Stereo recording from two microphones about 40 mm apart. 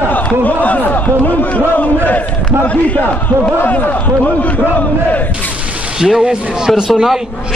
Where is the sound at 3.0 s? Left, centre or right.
Left.